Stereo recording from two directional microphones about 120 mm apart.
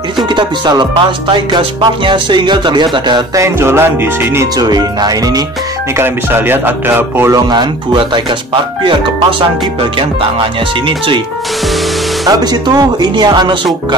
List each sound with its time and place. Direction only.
0.4 s music: 40° right (ahead or behind)
3.3 s music: 20° right (ahead or behind)
4.6 s music: 35° right (ahead or behind)
5.9 s music: 20° right (ahead or behind)
7.3 s music: 40° right (ahead or behind)
12.3 s music: 35° right (ahead or behind)